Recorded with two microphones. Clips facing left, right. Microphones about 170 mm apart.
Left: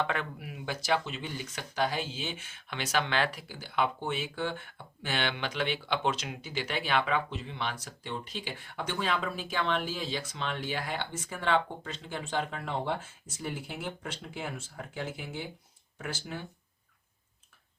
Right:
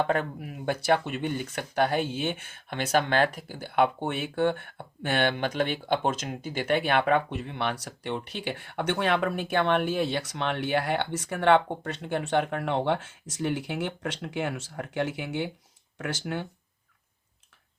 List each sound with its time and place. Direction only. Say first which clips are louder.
0.0 s speech: right 6 dB; 45° right (ahead or behind); by 16.5 s 80° right